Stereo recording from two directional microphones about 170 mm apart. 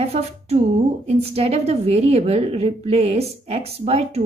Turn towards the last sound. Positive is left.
turn(degrees=-35)  # may be behind; listen again after turning